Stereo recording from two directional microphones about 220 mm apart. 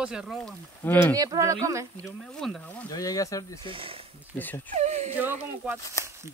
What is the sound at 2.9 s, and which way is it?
Speech, 15° left (ahead or behind).